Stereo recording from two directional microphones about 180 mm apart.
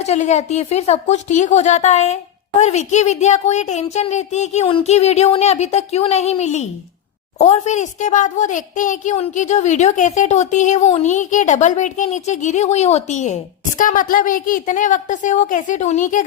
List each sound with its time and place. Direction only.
0.0 s a woman's voice: 40° left (ahead or behind)